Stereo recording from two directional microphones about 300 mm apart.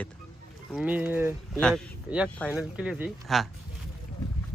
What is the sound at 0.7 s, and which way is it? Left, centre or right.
Speech, centre.